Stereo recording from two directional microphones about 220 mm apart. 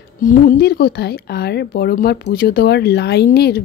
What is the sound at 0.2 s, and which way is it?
A woman's voice, 40° left (ahead or behind).